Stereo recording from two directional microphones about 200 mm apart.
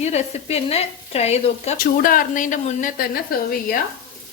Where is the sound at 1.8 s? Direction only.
45° left (ahead or behind).